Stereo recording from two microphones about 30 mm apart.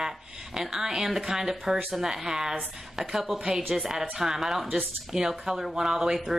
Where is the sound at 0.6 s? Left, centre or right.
Centre.